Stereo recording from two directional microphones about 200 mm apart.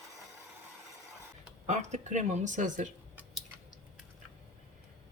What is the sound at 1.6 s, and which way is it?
Speech, 35° right (ahead or behind).